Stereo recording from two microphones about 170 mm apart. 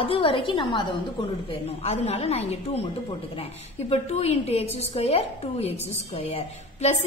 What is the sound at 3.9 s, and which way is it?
A woman's voice, 40° left (ahead or behind).